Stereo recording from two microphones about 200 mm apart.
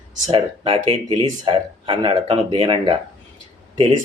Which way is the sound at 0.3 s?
25° right (ahead or behind).